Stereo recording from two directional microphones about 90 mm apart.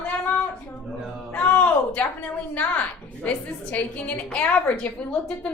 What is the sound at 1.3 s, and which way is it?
A woman's voice, 15° left (ahead or behind).